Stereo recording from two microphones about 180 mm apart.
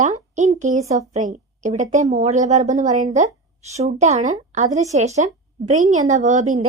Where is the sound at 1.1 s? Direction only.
40° right (ahead or behind).